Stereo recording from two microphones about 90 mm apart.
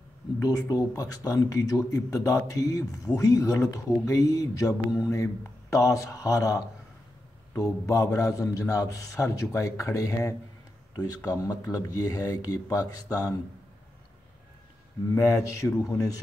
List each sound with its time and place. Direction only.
0.4 s speech: 40° left (ahead or behind)
15.1 s speech: 35° left (ahead or behind)